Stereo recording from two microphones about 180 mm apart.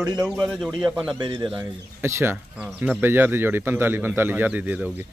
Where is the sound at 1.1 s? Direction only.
25° right (ahead or behind).